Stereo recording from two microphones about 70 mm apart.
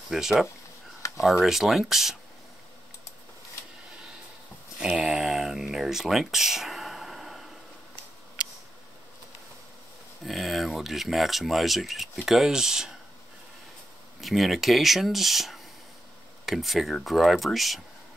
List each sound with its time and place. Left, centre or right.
0.1 s speech: centre
1.0 s a sound: left
1.4 s speech: centre
4.7 s a sound: centre
10.2 s speech: centre
14.2 s speech: centre